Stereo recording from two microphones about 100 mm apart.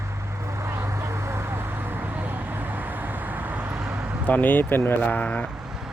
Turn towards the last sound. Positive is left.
turn(degrees=15)  # may be behind; listen again after turning